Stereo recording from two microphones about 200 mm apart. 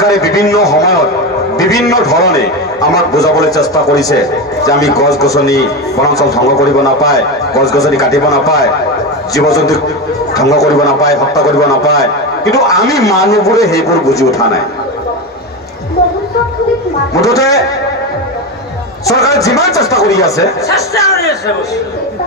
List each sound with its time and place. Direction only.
0.0 s a man's voice: 15° left (ahead or behind)
17.2 s a man's voice: 15° left (ahead or behind)
19.0 s a man's voice: 15° left (ahead or behind)